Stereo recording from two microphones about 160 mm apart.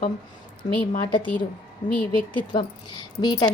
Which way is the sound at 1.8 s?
50° left (ahead or behind).